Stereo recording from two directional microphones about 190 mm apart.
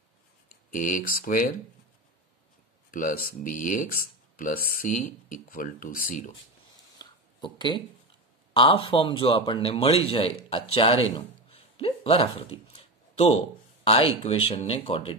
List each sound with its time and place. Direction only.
0.7 s speech: 45° left (ahead or behind)
2.9 s speech: 45° left (ahead or behind)
7.0 s a sound: 25° left (ahead or behind)
8.5 s a man's voice: 25° left (ahead or behind)
11.1 s a sound: 30° left (ahead or behind)
13.1 s speech: 30° left (ahead or behind)